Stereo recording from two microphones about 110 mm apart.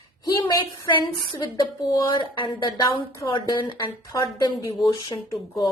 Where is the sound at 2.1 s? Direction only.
50° left (ahead or behind).